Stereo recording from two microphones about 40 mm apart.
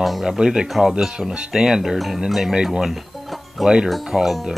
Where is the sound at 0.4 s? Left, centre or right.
Centre.